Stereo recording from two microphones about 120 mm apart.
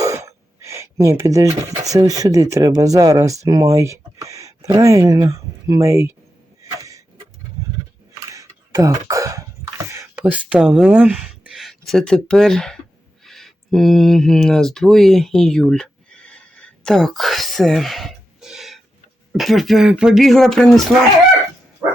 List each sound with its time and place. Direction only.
0.0 s speech: 25° right (ahead or behind)
6.6 s sneeze: 25° right (ahead or behind)
8.1 s a sound: 30° right (ahead or behind)
9.9 s speech: 20° right (ahead or behind); by 12.8 s 5° left (ahead or behind)
13.2 s a sound: 5° left (ahead or behind)
19.3 s speech: centre (ahead or behind)